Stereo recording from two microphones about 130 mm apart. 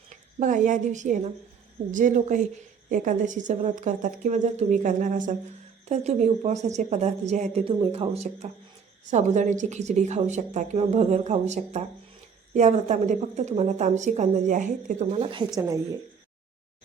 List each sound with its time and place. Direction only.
0.1 s speech: 75° right (ahead or behind)
1.9 s speech: 85° right
2.9 s a woman's voice: 85° right
5.8 s speech: 60° right (ahead or behind)
7.6 s speech: 50° right (ahead or behind)
9.0 s speech: 65° right (ahead or behind)
15.2 s a woman's voice: 40° right (ahead or behind)
15.5 s a woman's voice: 25° right (ahead or behind)